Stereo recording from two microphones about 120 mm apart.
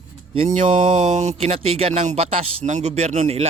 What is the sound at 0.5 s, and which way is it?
Speech, 90° right.